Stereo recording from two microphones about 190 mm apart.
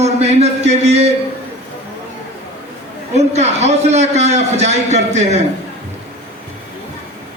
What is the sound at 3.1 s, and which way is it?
A man's voice, 35° right (ahead or behind).